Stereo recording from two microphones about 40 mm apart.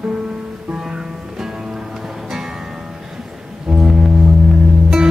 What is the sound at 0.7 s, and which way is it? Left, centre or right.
Music, centre.